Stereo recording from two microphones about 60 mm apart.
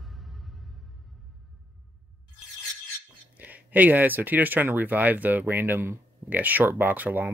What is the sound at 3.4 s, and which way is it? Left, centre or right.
Speech, right.